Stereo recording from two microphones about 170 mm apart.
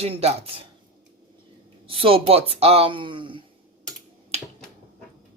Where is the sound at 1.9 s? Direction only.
35° right (ahead or behind).